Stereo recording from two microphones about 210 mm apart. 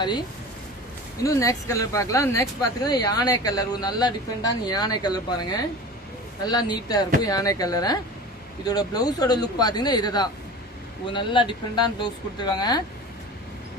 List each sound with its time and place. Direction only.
1.2 s speech: 15° left (ahead or behind)